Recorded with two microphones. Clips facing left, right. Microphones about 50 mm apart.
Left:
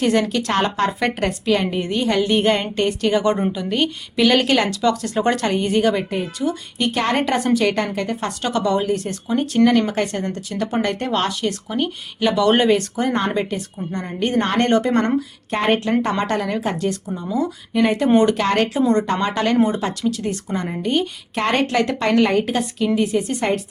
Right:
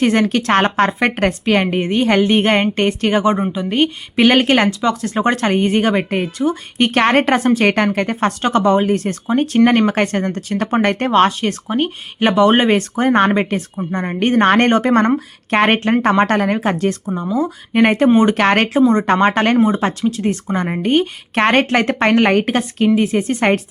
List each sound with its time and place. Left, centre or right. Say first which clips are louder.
0.0 s a woman's voice: right 4 dB; right
15.4 s speech: right 6 dB; right
19.8 s a woman's voice: right 4 dB; right